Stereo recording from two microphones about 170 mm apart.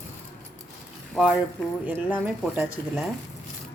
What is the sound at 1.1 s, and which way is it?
Speech, 5° right (ahead or behind).